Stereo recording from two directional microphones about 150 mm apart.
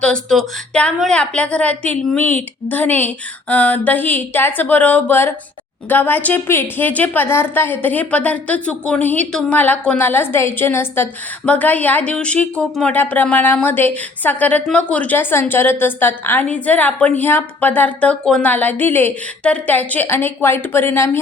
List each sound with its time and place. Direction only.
0.0 s a woman's voice: 5° left (ahead or behind)